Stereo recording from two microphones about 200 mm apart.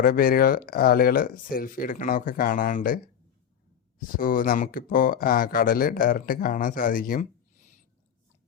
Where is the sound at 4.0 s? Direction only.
45° left (ahead or behind).